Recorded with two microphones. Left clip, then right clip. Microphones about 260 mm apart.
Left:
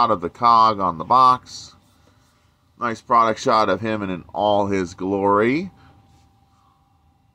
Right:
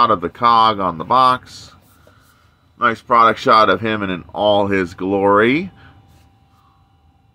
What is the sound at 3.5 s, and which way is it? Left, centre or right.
Speech, centre.